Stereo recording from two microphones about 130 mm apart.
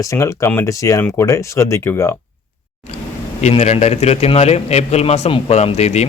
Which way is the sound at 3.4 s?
55° left (ahead or behind).